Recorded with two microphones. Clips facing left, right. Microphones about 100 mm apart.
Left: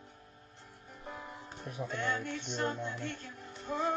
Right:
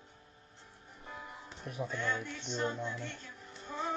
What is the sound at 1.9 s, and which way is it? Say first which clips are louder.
Music: left 3 dB; 60° left (ahead or behind).